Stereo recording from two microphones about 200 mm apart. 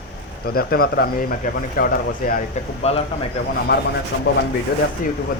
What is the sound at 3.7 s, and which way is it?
Speech, 50° left (ahead or behind).